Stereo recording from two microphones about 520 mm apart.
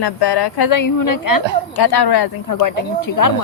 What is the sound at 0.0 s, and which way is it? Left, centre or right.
Speech, left.